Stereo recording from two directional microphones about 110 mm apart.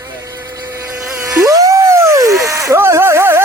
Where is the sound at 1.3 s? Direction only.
30° right (ahead or behind).